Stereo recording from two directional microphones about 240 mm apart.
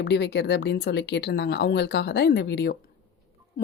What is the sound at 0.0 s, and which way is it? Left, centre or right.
Speech, left.